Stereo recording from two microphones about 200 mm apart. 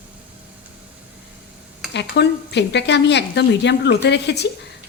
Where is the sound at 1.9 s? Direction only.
60° left (ahead or behind).